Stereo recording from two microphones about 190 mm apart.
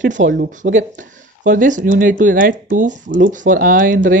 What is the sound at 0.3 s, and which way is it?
Speech, 45° right (ahead or behind).